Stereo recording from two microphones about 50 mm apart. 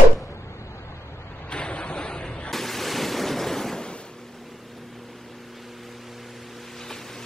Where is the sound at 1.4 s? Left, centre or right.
Left.